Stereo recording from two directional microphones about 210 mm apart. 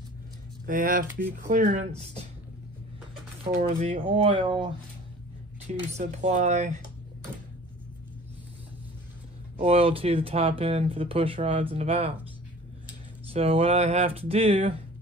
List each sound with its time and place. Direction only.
0.7 s speech: 40° right (ahead or behind)
3.6 s speech: 30° right (ahead or behind)
5.9 s speech: 30° right (ahead or behind)
9.6 s speech: 25° right (ahead or behind)
13.3 s speech: 25° right (ahead or behind)